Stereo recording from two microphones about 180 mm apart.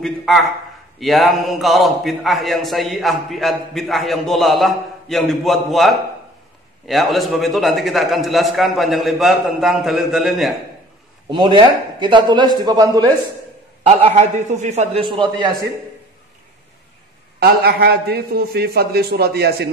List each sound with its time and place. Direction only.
0.0 s a man's voice: centre (ahead or behind)
11.2 s speech: 25° right (ahead or behind)
13.8 s a man's voice: 40° right (ahead or behind)
17.4 s a man's voice: 60° right (ahead or behind)